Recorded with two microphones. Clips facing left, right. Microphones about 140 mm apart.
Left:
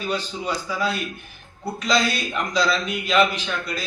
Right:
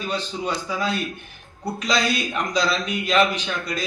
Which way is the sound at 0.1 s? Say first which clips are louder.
Even; 10° left (ahead or behind).